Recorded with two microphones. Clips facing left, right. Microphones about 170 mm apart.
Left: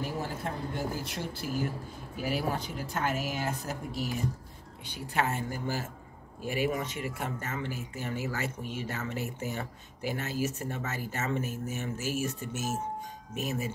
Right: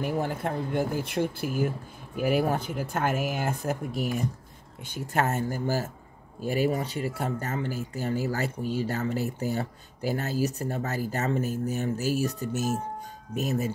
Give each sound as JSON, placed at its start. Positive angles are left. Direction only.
{"t": 0.0, "sound": "speech", "side_deg": -60}